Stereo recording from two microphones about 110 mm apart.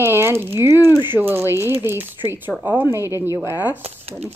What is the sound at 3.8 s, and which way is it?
Speech, 65° right (ahead or behind).